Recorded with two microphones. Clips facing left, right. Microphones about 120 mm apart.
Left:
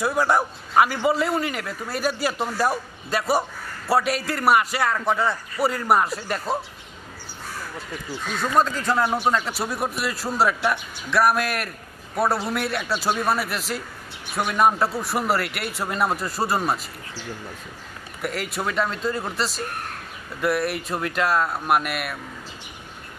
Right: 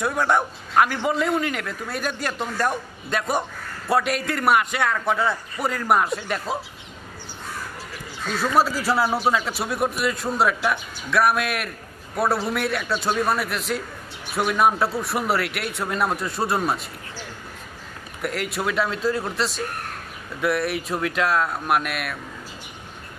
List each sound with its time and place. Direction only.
0.0 s a man's voice: 5° left (ahead or behind)
8.4 s a man's voice: 5° right (ahead or behind)
18.2 s a man's voice: centre (ahead or behind)